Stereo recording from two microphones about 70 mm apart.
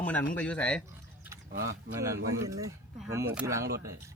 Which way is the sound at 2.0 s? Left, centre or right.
Right.